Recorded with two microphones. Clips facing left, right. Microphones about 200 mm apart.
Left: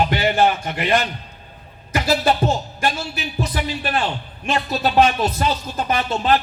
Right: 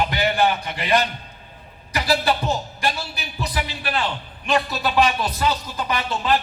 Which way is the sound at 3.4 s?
45° left (ahead or behind).